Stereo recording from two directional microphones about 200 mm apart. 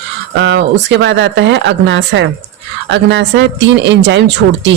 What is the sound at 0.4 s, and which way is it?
Speech, 65° right (ahead or behind).